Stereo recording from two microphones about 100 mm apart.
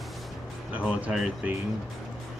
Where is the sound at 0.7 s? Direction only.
10° right (ahead or behind).